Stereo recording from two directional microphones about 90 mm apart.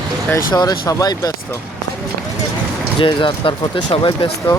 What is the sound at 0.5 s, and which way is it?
Speech, 50° left (ahead or behind).